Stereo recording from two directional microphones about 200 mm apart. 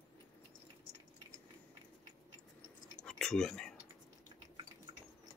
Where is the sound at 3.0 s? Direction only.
5° left (ahead or behind).